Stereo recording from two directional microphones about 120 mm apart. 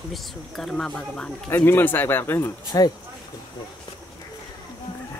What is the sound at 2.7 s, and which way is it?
Speech, 30° left (ahead or behind).